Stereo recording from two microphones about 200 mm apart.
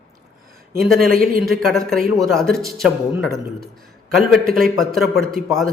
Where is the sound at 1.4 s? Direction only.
Centre (ahead or behind).